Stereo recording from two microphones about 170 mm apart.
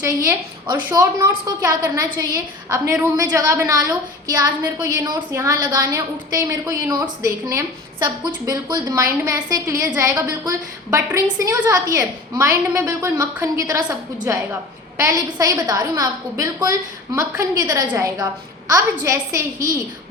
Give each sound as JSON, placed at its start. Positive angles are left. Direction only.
{"t": 0.0, "sound": "a woman's voice", "side_deg": -20}